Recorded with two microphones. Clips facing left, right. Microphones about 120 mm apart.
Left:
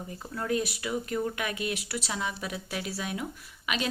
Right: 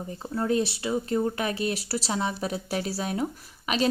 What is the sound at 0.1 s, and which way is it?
A woman's voice, 30° right (ahead or behind).